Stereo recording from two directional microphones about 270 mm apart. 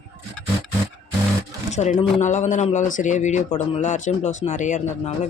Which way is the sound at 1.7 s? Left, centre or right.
Left.